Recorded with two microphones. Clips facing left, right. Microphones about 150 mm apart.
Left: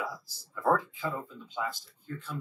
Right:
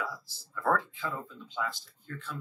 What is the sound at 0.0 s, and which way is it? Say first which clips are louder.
Speech: left 1 dB; 15° left (ahead or behind).